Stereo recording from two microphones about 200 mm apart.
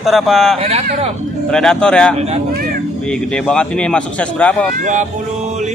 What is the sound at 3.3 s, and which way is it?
Speech, 5° left (ahead or behind).